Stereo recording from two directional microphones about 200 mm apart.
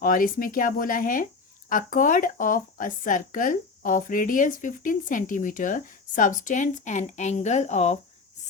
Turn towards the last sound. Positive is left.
turn(degrees=35)  # may be behind; listen again after turning